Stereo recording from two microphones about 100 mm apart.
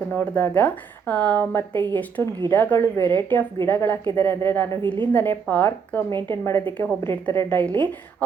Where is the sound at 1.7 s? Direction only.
50° right (ahead or behind).